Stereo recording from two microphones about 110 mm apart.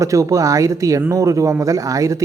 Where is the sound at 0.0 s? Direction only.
30° right (ahead or behind).